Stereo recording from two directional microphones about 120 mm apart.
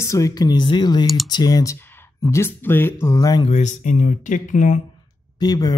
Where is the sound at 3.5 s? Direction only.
75° left (ahead or behind).